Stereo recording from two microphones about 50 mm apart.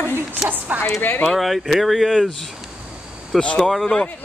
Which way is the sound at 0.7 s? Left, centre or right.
Right.